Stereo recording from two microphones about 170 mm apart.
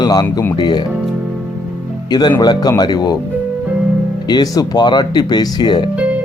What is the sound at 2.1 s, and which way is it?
Speech, 25° left (ahead or behind).